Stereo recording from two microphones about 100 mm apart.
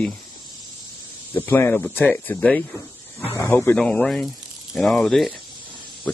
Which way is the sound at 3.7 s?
10° left (ahead or behind).